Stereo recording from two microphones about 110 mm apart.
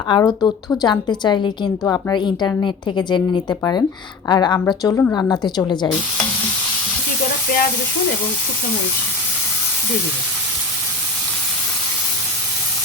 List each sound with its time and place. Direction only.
0.1 s a woman's voice: 40° left (ahead or behind)